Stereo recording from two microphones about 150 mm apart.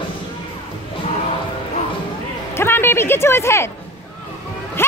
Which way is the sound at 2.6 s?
15° left (ahead or behind).